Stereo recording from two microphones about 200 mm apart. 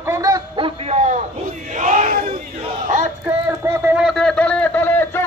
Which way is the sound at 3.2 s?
10° right (ahead or behind).